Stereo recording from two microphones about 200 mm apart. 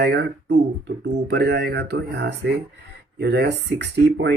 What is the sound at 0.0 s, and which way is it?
Speech, 55° right (ahead or behind).